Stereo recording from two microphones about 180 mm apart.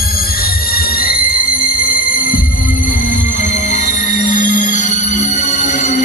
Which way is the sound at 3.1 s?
45° left (ahead or behind).